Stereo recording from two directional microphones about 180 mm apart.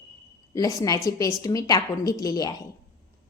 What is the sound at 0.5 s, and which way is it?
A woman's voice, 20° left (ahead or behind).